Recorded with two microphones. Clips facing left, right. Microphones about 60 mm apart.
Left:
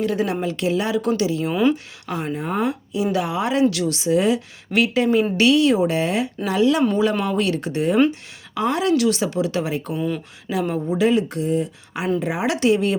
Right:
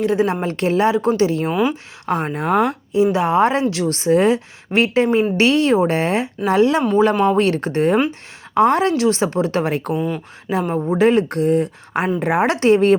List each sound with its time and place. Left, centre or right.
0.0 s a woman's voice: right
0.4 s speech: right
2.9 s speech: right
10.5 s speech: right
12.5 s speech: right